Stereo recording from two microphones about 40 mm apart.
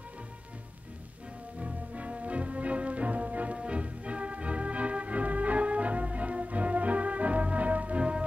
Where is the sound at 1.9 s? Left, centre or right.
Right.